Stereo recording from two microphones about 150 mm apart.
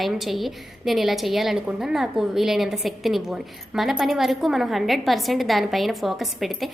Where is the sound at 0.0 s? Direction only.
Centre (ahead or behind).